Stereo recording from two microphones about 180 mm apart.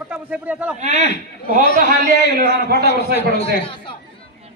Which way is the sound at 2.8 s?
60° left (ahead or behind).